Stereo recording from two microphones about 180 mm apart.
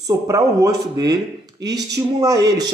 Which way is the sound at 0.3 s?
20° right (ahead or behind).